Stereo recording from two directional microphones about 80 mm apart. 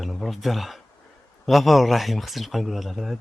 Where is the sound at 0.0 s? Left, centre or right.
Centre.